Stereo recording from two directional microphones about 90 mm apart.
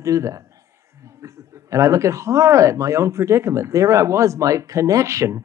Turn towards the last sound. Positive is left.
turn(degrees=-35)  # may be behind; listen again after turning